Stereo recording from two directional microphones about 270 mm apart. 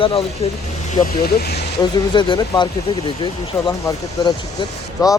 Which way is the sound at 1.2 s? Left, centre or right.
Left.